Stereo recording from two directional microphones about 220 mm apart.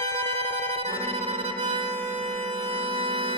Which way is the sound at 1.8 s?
10° left (ahead or behind).